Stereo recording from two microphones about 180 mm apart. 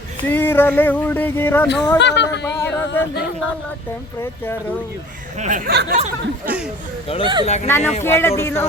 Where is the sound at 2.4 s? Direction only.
15° left (ahead or behind).